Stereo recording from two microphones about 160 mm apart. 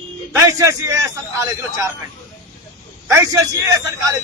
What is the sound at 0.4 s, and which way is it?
Speech, 20° right (ahead or behind).